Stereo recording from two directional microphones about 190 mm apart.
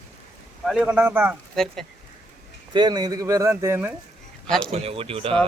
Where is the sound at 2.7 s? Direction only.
20° right (ahead or behind).